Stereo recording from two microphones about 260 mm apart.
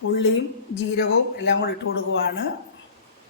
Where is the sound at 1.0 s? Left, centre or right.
Left.